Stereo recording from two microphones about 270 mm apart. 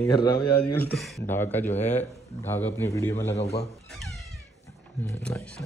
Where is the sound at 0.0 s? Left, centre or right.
Centre.